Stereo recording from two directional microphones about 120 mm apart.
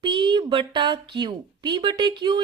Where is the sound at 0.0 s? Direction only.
40° right (ahead or behind).